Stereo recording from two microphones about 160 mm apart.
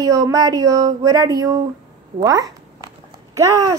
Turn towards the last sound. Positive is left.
turn(degrees=-20)  # may be behind; listen again after turning